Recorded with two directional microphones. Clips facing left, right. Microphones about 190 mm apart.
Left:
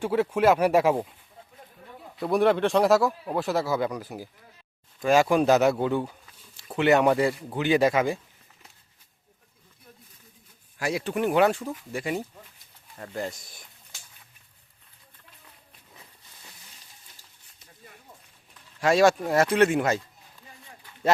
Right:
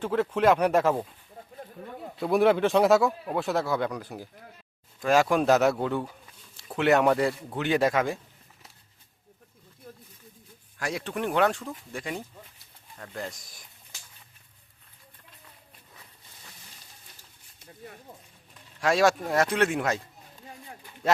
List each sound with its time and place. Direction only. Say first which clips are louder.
0.0 s speech: left 1 dB; 10° left (ahead or behind)
2.1 s speech: even; centre (ahead or behind)
10.8 s speech: left 4 dB; 5° left (ahead or behind)
18.8 s speech: left 3 dB; centre (ahead or behind)